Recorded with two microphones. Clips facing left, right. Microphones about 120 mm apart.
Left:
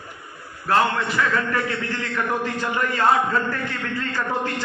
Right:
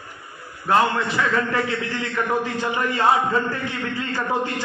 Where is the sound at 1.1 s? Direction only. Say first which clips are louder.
Right 1 dB; 25° right (ahead or behind).